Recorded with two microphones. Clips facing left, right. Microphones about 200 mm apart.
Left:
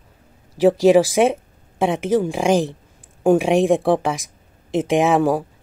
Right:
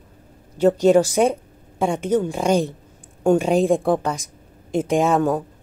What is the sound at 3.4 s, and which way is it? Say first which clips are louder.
Speech: left 1 dB; 75° left (ahead or behind).